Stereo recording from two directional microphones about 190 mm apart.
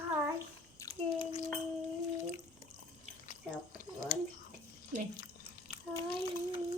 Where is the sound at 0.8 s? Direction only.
25° left (ahead or behind).